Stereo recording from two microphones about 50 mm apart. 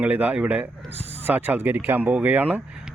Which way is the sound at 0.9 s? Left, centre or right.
Right.